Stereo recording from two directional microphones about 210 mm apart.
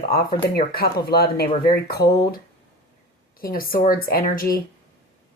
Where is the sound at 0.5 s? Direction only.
45° left (ahead or behind).